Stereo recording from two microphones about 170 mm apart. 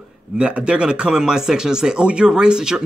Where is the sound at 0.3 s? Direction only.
5° right (ahead or behind).